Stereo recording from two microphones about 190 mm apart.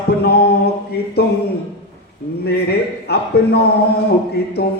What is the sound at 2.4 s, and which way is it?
Speech, 60° left (ahead or behind).